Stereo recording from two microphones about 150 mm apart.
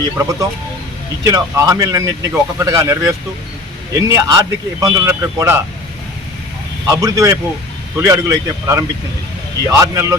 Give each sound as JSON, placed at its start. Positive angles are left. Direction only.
{"t": 0.0, "sound": "speech", "side_deg": -20}
{"t": 6.8, "sound": "speech", "side_deg": -20}